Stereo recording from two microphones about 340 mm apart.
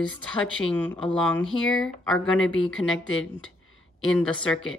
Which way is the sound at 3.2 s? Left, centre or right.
Left.